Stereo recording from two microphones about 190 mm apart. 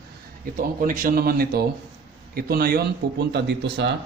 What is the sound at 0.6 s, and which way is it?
A man's voice, 45° right (ahead or behind).